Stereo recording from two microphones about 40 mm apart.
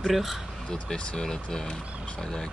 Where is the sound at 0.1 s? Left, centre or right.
Centre.